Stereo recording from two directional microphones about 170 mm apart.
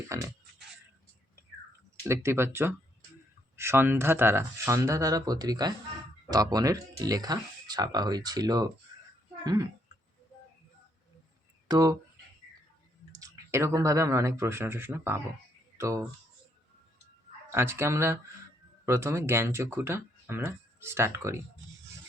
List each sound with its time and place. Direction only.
0.1 s speech: 20° right (ahead or behind)
2.0 s speech: 15° right (ahead or behind)
8.9 s a sound: 25° right (ahead or behind)
9.4 s speech: 25° right (ahead or behind)
11.7 s speech: 20° right (ahead or behind)
13.1 s speech: 20° right (ahead or behind)
17.5 s speech: 15° right (ahead or behind)